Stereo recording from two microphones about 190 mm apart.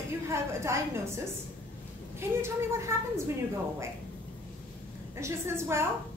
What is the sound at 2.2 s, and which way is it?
Speech, 15° right (ahead or behind).